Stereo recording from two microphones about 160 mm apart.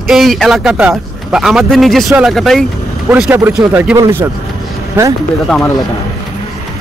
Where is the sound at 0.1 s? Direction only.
Centre (ahead or behind).